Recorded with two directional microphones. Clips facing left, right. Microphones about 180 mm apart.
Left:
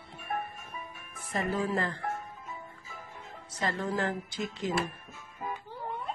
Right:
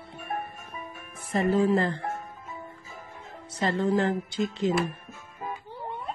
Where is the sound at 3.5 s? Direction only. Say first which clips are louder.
Right 7 dB; 30° right (ahead or behind).